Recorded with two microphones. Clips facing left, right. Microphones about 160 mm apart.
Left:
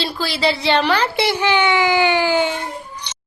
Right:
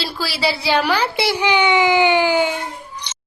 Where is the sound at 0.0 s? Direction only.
5° right (ahead or behind).